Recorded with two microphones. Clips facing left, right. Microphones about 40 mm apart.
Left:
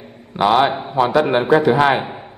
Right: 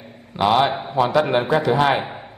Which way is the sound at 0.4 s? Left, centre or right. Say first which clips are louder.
Left 3 dB; centre.